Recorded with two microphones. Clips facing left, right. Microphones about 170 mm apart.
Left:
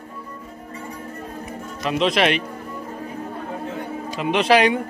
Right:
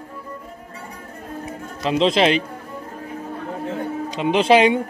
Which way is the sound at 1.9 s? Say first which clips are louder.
Right 3 dB; 25° right (ahead or behind).